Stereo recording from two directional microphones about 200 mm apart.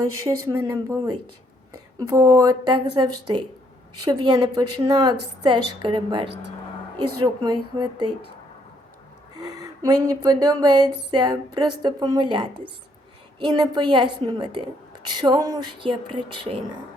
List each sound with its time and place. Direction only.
0.4 s a woman's voice: 15° right (ahead or behind)
7.4 s a woman's voice: 20° right (ahead or behind)
9.4 s a sound: 20° right (ahead or behind)
10.2 s a woman's voice: 20° right (ahead or behind)